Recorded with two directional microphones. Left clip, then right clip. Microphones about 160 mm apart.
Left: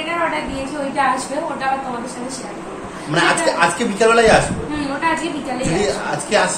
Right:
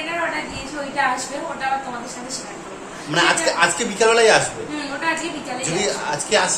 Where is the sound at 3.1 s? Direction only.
15° right (ahead or behind).